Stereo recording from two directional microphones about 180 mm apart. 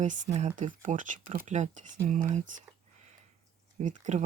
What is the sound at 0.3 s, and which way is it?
Speech, 40° right (ahead or behind).